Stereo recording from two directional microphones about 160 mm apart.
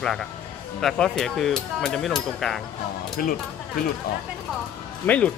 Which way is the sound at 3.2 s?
65° left (ahead or behind).